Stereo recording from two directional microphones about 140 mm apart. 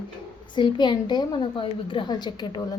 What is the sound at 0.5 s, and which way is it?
A woman's voice, 35° left (ahead or behind).